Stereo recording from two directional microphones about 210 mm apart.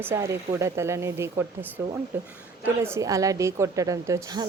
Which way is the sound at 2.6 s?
10° right (ahead or behind).